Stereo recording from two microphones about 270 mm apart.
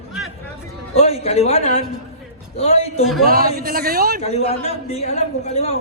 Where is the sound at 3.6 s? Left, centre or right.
Right.